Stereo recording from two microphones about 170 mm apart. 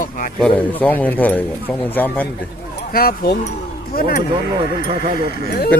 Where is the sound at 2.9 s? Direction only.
65° left (ahead or behind).